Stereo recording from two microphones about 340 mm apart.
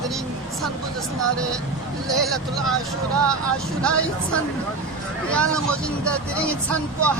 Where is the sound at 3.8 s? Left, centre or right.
Centre.